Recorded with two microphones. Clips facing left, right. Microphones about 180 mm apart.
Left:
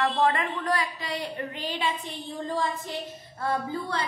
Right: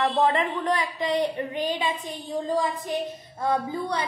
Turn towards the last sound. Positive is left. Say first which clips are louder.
# right 3 dB
turn(degrees=-20)  # may be behind; listen again after turning